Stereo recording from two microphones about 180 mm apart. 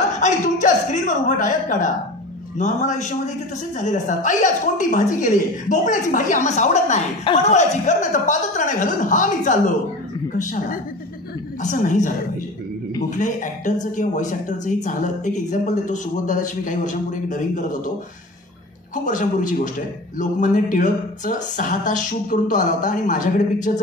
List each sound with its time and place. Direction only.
0.2 s a woman's voice: 45° left (ahead or behind)
13.1 s a woman's voice: 45° left (ahead or behind)
19.0 s a woman's voice: 45° left (ahead or behind)